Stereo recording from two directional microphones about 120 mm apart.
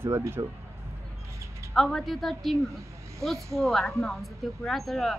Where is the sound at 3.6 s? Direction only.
Centre (ahead or behind).